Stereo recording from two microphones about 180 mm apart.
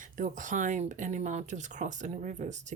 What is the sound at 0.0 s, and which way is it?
Speech, 45° right (ahead or behind).